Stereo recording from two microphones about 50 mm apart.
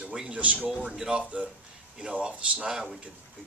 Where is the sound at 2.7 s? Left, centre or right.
Centre.